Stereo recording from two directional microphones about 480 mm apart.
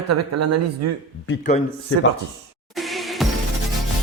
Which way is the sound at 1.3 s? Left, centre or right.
Centre.